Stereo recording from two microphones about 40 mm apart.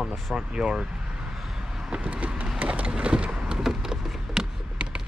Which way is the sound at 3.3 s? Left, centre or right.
Centre.